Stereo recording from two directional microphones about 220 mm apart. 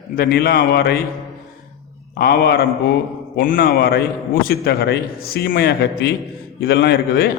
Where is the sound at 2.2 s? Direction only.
45° left (ahead or behind).